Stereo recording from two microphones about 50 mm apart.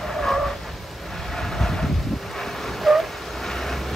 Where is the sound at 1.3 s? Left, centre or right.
Centre.